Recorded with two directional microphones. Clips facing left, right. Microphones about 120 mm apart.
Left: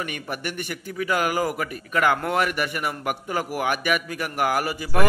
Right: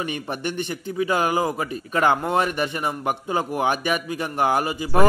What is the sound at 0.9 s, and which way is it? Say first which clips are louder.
A man's voice: right 2 dB; 25° right (ahead or behind).